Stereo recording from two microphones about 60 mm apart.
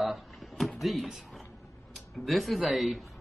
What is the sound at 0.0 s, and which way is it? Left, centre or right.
Drawer open or close, centre.